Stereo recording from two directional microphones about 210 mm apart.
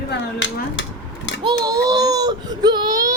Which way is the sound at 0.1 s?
60° left (ahead or behind).